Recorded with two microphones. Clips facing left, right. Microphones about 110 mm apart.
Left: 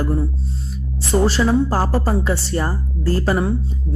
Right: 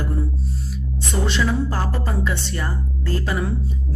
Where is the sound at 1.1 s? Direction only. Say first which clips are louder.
Left 6 dB; 35° left (ahead or behind).